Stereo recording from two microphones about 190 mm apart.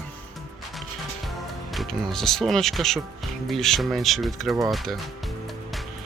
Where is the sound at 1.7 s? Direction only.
Centre (ahead or behind).